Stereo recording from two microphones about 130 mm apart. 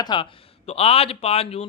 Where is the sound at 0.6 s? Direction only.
50° left (ahead or behind).